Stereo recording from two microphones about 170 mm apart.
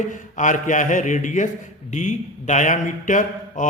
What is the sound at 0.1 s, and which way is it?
A man's voice, 50° left (ahead or behind).